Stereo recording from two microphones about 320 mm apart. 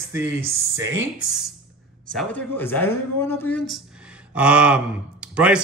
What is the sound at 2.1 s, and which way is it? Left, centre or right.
Speech, centre.